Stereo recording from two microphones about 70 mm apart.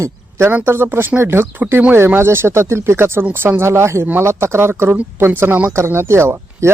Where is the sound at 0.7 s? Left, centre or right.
Right.